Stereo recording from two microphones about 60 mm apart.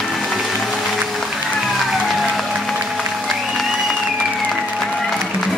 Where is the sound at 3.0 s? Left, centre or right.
Centre.